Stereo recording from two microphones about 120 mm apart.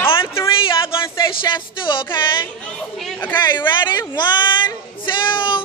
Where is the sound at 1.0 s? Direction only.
40° left (ahead or behind).